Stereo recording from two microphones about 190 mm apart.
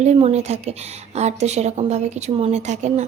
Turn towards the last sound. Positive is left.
turn(degrees=-40)  # may be behind; listen again after turning